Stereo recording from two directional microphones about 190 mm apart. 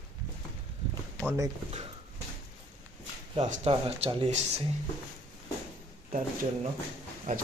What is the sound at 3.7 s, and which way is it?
Speech, 30° right (ahead or behind).